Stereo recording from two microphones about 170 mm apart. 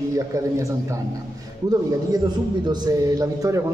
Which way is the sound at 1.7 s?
25° right (ahead or behind).